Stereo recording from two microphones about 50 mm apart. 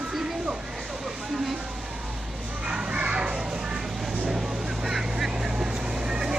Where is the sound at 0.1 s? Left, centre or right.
Centre.